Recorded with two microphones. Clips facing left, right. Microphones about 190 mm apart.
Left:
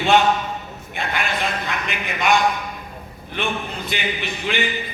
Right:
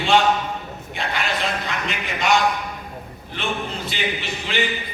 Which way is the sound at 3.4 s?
55° left (ahead or behind).